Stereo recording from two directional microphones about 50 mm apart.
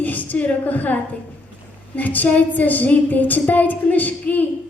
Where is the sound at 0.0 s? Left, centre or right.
Left.